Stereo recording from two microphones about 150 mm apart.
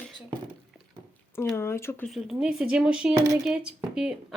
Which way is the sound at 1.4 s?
15° left (ahead or behind).